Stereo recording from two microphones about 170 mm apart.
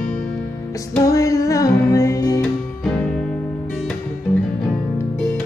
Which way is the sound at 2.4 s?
5° left (ahead or behind).